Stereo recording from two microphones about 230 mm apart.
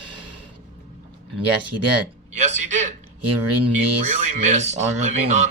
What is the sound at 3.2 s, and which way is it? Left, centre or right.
Speech, right.